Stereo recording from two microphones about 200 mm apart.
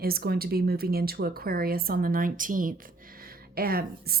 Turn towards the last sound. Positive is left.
turn(degrees=-50)  # may be behind; listen again after turning